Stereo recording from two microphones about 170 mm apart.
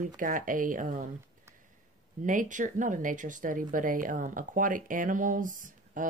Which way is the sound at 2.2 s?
50° right (ahead or behind).